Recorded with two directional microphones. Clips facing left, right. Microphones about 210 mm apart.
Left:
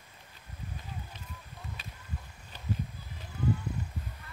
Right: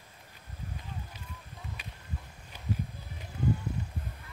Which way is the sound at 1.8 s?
15° right (ahead or behind).